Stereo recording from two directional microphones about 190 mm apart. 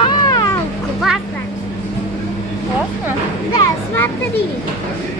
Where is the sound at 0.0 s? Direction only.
25° left (ahead or behind).